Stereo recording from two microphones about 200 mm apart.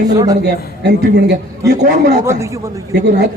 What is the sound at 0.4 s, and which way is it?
Speech, 55° right (ahead or behind).